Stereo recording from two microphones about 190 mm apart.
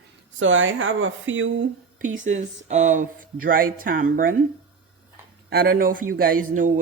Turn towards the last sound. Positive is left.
turn(degrees=-45)  # may be behind; listen again after turning